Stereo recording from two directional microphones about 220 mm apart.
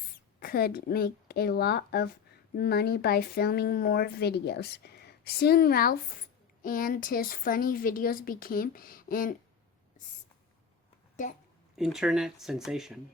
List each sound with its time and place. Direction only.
0.3 s a woman's voice: 45° left (ahead or behind)
11.8 s speech: 5° right (ahead or behind)